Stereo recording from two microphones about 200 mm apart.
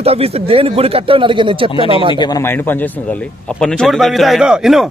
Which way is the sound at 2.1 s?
20° left (ahead or behind).